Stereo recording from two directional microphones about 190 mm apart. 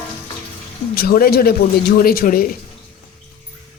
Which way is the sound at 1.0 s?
50° left (ahead or behind).